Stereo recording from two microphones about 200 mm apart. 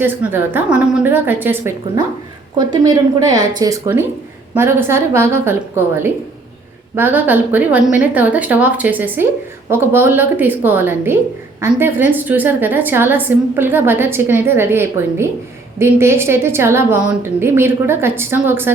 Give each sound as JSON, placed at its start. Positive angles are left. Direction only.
{"t": 0.0, "sound": "a woman's voice", "side_deg": -10}